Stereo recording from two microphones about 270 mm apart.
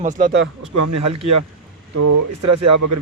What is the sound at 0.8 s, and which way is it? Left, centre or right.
Speech, right.